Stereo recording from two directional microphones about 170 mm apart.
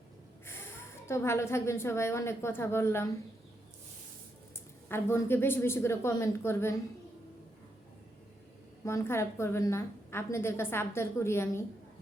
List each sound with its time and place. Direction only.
1.0 s a woman's voice: 15° left (ahead or behind)
4.9 s a woman's voice: 15° left (ahead or behind)
8.8 s a woman's voice: 15° left (ahead or behind)